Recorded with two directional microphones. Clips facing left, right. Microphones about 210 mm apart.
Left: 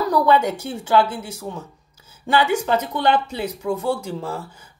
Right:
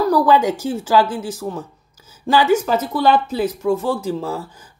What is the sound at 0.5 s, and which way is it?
Speech, 90° right.